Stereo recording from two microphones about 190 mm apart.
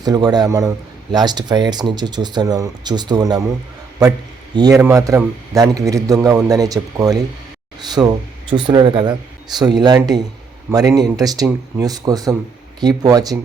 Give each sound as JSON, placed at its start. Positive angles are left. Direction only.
{"t": 0.0, "sound": "speech", "side_deg": -20}
{"t": 4.5, "sound": "a man's voice", "side_deg": -20}